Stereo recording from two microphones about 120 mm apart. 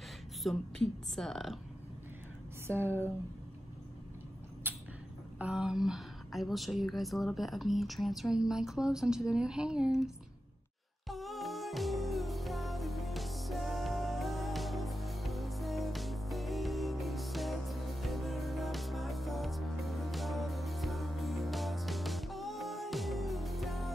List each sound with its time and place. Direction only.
0.4 s a woman's voice: centre (ahead or behind)
2.6 s speech: 20° right (ahead or behind)
4.6 s a sound: 15° right (ahead or behind)
5.4 s a woman's voice: 5° right (ahead or behind)
11.1 s music: centre (ahead or behind)